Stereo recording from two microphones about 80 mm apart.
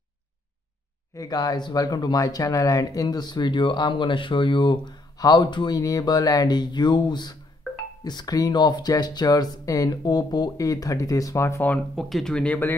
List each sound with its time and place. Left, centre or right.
1.1 s speech: left
5.8 s speech: left
10.6 s speech: left
11.9 s speech: centre
12.4 s speech: left